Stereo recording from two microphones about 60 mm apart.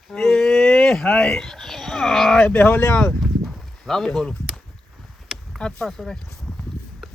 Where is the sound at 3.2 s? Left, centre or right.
Centre.